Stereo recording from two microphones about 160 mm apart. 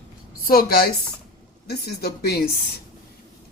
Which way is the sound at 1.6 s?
80° left.